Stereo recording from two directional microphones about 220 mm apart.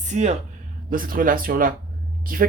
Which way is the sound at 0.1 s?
30° right (ahead or behind).